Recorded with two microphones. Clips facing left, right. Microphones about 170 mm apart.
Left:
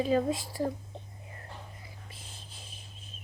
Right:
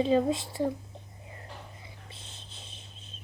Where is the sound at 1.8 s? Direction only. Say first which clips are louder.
Even; 25° right (ahead or behind).